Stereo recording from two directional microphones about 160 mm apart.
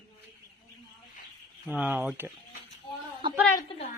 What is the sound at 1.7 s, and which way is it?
Speech, 10° right (ahead or behind).